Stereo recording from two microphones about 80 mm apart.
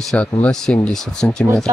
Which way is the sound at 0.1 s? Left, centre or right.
Centre.